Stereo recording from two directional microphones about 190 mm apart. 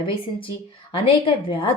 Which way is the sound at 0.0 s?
25° left (ahead or behind).